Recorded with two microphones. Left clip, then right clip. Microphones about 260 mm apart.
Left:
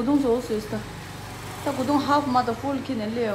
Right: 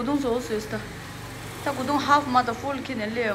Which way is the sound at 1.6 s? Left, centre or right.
Centre.